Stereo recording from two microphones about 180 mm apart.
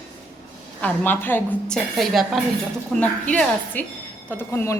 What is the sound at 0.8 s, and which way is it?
A woman's voice, 10° left (ahead or behind).